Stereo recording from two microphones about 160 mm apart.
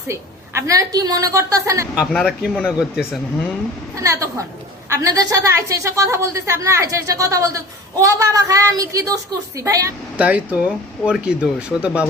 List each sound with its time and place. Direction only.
0.1 s a woman's voice: 20° right (ahead or behind)
2.0 s speech: 5° right (ahead or behind)
4.0 s a woman's voice: 20° right (ahead or behind)
10.2 s speech: 10° right (ahead or behind)